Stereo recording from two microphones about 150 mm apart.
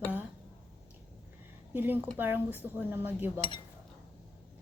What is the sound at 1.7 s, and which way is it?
Speech, 15° right (ahead or behind).